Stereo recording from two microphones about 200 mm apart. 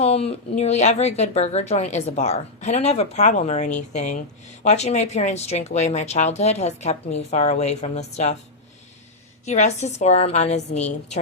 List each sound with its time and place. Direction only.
0.0 s speech: 30° left (ahead or behind)
9.5 s speech: 35° left (ahead or behind)